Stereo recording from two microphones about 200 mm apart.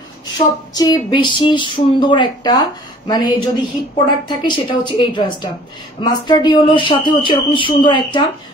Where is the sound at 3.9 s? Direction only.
25° left (ahead or behind).